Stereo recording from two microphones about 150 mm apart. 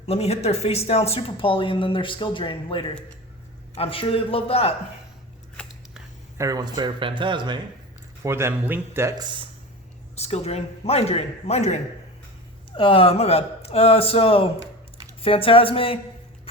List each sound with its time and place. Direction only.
0.0 s speech: 45° left (ahead or behind)
6.3 s speech: 20° right (ahead or behind)
8.2 s speech: 15° right (ahead or behind)
10.2 s a man's voice: 45° left (ahead or behind)
12.7 s speech: 35° left (ahead or behind)